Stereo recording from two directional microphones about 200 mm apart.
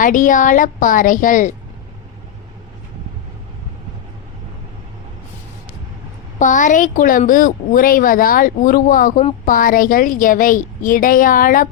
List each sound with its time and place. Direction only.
0.0 s a woman's voice: 40° left (ahead or behind)
6.4 s a woman's voice: 40° left (ahead or behind)